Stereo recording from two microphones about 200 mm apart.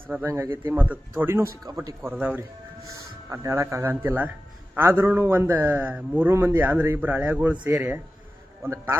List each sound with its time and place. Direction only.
0.1 s a man's voice: 10° right (ahead or behind)
2.0 s a man's voice: 5° right (ahead or behind)